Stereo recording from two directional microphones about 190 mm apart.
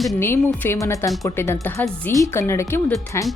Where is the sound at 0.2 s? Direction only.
10° left (ahead or behind).